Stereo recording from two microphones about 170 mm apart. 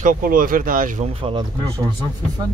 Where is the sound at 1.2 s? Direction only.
30° right (ahead or behind).